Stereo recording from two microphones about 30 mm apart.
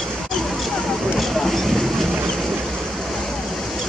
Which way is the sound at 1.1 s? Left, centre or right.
Centre.